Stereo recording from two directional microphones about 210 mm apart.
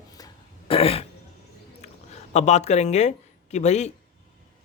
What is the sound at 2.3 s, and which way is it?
Speech, 30° left (ahead or behind).